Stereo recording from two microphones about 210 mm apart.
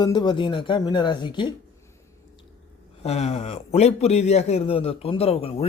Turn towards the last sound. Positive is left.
turn(degrees=30)  # may be behind; listen again after turning